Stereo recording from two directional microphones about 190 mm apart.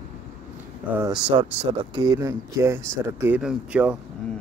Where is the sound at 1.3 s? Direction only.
25° right (ahead or behind); by 3.9 s 5° right (ahead or behind).